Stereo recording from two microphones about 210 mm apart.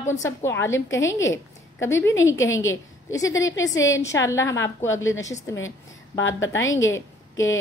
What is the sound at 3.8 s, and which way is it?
A woman's voice, 15° left (ahead or behind).